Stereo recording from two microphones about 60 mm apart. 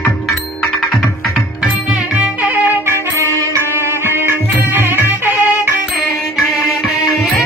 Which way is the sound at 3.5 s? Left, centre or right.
Right.